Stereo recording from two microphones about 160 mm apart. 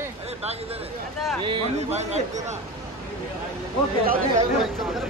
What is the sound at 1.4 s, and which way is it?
Speech, 30° right (ahead or behind).